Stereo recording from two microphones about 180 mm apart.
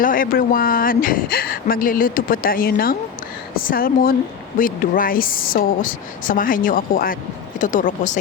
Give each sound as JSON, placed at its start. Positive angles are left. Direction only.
{"t": 0.0, "sound": "speech", "side_deg": 50}